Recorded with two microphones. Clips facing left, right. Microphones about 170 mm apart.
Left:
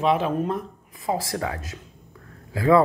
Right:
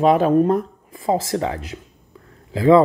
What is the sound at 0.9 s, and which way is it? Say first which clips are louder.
Speech: right 6 dB; 30° right (ahead or behind).